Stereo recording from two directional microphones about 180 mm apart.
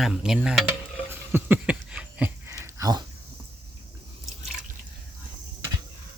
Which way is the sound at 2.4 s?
20° right (ahead or behind).